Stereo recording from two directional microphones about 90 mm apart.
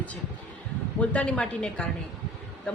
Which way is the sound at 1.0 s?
15° left (ahead or behind).